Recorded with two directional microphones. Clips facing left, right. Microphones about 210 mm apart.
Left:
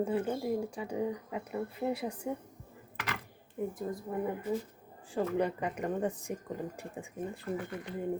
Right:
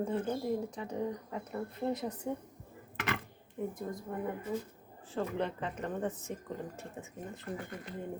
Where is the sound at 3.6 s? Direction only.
5° left (ahead or behind).